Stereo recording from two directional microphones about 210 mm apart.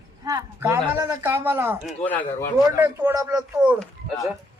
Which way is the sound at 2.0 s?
5° left (ahead or behind).